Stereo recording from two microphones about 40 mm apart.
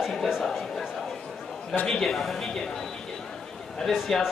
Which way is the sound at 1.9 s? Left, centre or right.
Centre.